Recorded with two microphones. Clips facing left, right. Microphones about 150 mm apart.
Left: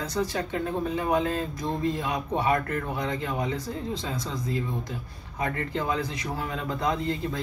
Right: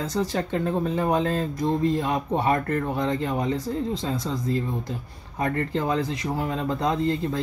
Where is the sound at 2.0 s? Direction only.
35° right (ahead or behind).